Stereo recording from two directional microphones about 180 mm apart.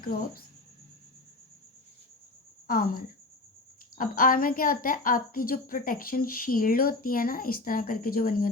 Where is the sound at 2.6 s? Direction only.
55° left (ahead or behind).